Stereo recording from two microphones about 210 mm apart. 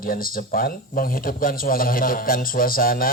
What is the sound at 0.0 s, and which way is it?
A man's voice, 45° left (ahead or behind).